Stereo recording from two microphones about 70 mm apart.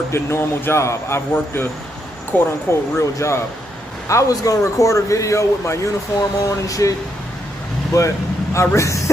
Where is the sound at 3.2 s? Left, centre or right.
Left.